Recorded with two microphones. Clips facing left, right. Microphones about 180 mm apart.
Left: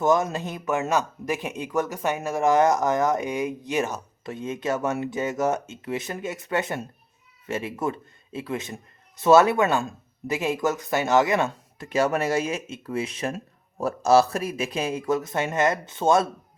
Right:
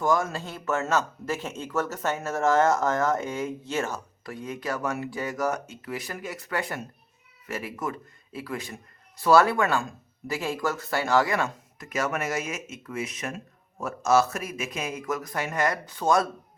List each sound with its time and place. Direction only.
0.0 s speech: 20° left (ahead or behind)